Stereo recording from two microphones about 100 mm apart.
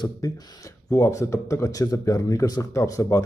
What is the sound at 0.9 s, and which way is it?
Speech, 30° left (ahead or behind).